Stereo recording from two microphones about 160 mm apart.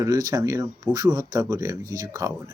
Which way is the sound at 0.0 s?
20° right (ahead or behind).